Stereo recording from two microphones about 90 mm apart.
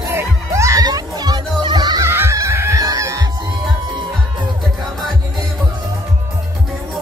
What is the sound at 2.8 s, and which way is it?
Chicken, 40° right (ahead or behind).